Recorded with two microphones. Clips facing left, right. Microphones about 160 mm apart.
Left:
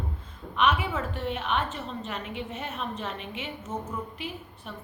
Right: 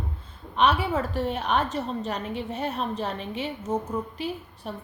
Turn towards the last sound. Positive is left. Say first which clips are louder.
# right 5 dB
turn(degrees=-35)  # may be behind; listen again after turning